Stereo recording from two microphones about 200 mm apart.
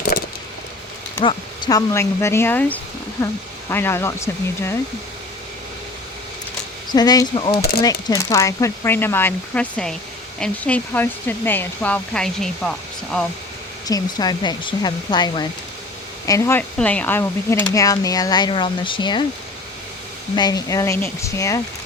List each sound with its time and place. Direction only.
0.1 s vehicle: 45° left (ahead or behind)
1.2 s speech: 25° left (ahead or behind)
6.9 s speech: 20° left (ahead or behind); by 13.2 s 5° left (ahead or behind)
13.8 s speech: 20° left (ahead or behind)
20.3 s speech: 20° left (ahead or behind)